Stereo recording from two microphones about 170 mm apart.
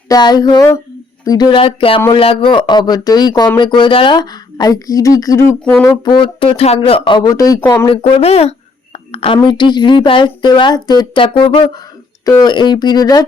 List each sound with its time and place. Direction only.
0.1 s speech: 25° left (ahead or behind)
5.8 s a sound: 15° left (ahead or behind)
6.1 s speech: 30° left (ahead or behind)
7.9 s speech: 35° left (ahead or behind)